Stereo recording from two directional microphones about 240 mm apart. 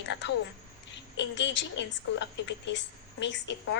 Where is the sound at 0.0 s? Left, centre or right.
Left.